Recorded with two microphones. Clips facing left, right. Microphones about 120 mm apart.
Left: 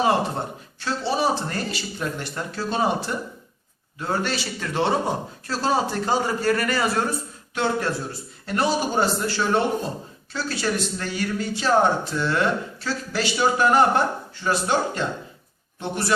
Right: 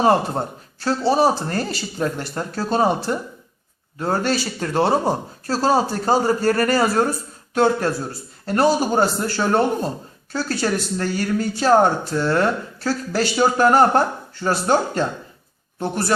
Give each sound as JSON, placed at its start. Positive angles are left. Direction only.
{"t": 0.0, "sound": "a man's voice", "side_deg": -40}